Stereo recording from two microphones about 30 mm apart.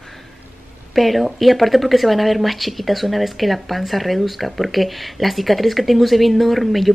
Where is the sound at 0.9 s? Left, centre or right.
Centre.